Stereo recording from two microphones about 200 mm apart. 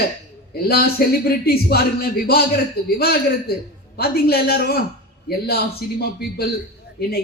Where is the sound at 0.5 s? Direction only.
50° left (ahead or behind).